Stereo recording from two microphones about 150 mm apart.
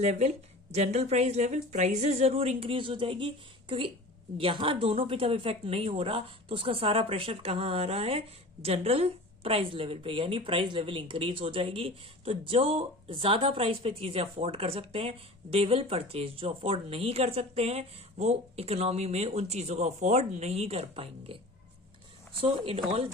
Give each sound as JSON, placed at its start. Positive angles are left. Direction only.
{"t": 0.0, "sound": "a woman's voice", "side_deg": -45}
{"t": 22.4, "sound": "a woman's voice", "side_deg": -40}